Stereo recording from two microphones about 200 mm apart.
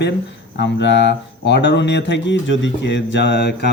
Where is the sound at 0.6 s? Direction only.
60° left (ahead or behind).